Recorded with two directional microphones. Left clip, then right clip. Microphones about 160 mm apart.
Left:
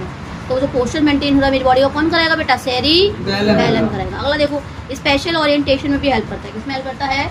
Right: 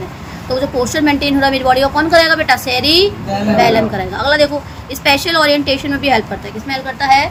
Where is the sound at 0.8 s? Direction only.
30° right (ahead or behind).